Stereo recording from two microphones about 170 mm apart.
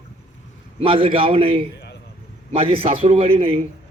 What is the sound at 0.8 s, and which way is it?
A man's voice, 30° right (ahead or behind).